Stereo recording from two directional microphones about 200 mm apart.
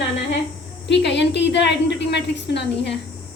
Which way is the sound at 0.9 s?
60° left (ahead or behind).